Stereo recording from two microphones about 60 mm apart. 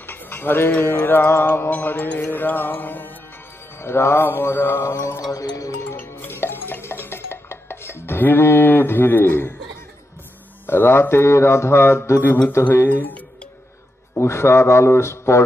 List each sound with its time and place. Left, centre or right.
0.0 s mantra: left
1.7 s music: left
3.8 s mantra: left
5.3 s music: left
5.9 s music: left
10.7 s mantra: left
12.6 s music: left
14.1 s mantra: left